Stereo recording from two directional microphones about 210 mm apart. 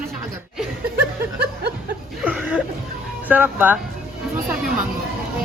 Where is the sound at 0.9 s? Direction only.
50° right (ahead or behind).